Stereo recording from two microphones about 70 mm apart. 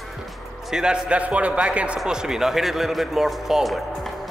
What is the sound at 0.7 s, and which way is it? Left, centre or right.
A man's voice, centre.